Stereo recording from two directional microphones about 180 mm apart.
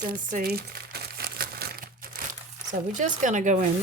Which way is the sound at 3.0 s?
45° right (ahead or behind).